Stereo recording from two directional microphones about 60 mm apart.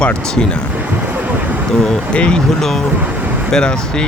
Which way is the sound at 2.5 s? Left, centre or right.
Centre.